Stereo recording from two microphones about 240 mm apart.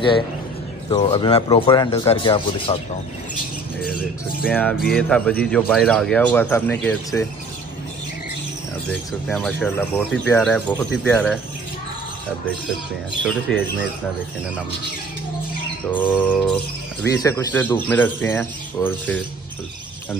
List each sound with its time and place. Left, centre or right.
0.8 s speech: left
4.5 s speech: centre
9.3 s speech: centre
13.2 s speech: centre
15.9 s speech: centre